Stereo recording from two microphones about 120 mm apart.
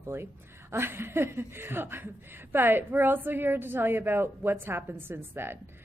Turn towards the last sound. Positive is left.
turn(degrees=-20)  # may be behind; listen again after turning